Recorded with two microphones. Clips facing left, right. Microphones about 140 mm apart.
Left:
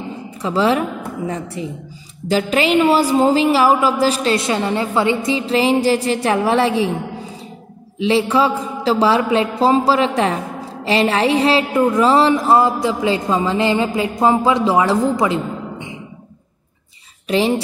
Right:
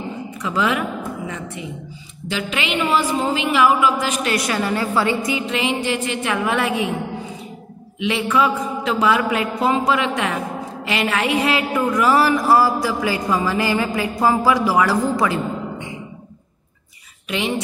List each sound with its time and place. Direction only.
0.4 s a woman's voice: 30° left (ahead or behind)
8.0 s a man's voice: 30° left (ahead or behind)
17.3 s a woman's voice: 35° left (ahead or behind)